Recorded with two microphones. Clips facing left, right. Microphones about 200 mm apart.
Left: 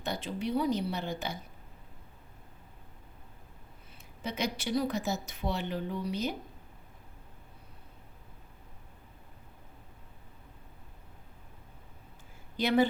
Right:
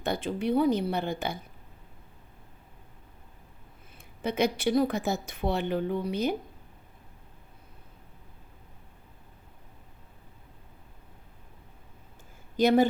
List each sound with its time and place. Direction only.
0.0 s a woman's voice: 55° right (ahead or behind)
4.2 s a woman's voice: 55° right (ahead or behind)
12.5 s speech: 45° right (ahead or behind)